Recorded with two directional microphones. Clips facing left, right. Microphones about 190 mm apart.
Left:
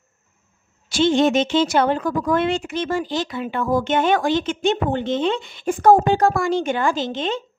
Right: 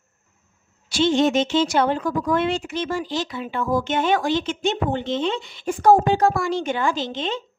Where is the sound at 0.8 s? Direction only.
50° left (ahead or behind).